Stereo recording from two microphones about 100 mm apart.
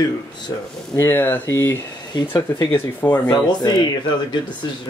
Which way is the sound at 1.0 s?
20° left (ahead or behind).